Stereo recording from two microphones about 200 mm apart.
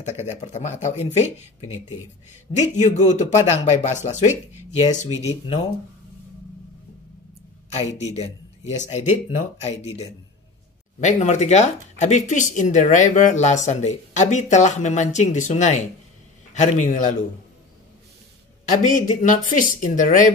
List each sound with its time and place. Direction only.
0.2 s speech: 35° left (ahead or behind)
2.7 s speech: 35° left (ahead or behind)
8.0 s speech: 35° left (ahead or behind)
18.8 s speech: 40° left (ahead or behind)